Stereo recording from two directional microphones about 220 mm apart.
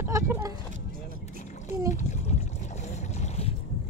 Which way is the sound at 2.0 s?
30° left (ahead or behind).